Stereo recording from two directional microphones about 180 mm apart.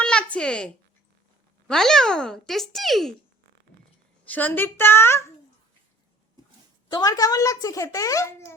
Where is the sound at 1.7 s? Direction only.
Centre (ahead or behind).